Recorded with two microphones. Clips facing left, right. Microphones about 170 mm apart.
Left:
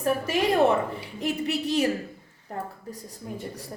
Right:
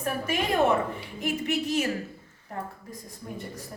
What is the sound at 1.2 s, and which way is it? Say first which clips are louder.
Speech: left 1 dB; 35° left (ahead or behind).